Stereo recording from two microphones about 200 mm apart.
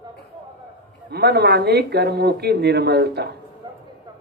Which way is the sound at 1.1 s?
55° right (ahead or behind).